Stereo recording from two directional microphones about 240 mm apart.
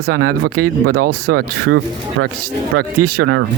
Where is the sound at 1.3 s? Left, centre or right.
Right.